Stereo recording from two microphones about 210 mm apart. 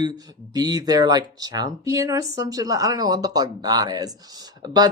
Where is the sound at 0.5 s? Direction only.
20° right (ahead or behind).